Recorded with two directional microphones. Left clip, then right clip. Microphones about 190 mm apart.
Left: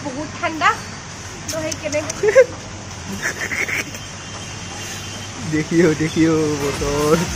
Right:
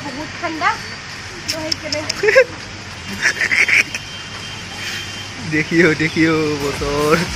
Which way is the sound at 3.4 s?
5° left (ahead or behind).